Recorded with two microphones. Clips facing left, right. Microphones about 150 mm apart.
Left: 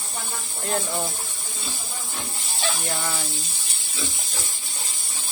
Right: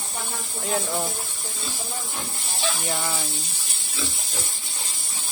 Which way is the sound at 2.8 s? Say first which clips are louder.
Right 1 dB; 5° right (ahead or behind).